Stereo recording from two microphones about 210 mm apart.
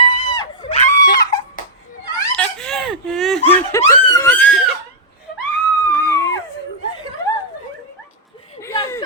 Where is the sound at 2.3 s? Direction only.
5° left (ahead or behind).